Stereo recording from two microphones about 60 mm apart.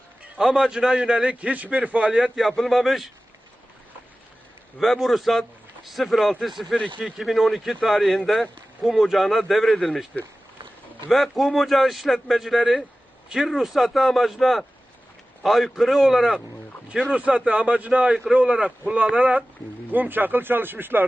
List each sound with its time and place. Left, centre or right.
0.3 s a man's voice: centre
2.4 s speech: centre
4.8 s speech: centre
11.1 s speech: centre
17.2 s a man's voice: centre; by 21.1 s right